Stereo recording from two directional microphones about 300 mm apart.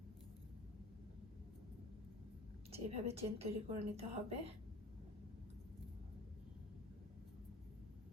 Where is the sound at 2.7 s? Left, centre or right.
Centre.